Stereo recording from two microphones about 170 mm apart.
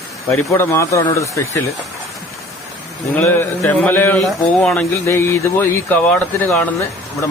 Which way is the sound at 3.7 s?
10° left (ahead or behind).